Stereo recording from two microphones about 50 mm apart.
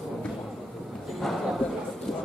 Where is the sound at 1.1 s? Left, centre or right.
Centre.